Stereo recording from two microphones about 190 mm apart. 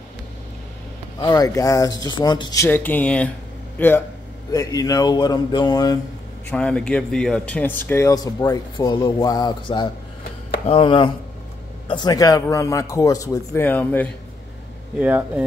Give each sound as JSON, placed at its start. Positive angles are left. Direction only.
{"t": 1.2, "sound": "speech", "side_deg": 20}
{"t": 6.5, "sound": "speech", "side_deg": 5}
{"t": 15.0, "sound": "speech", "side_deg": -5}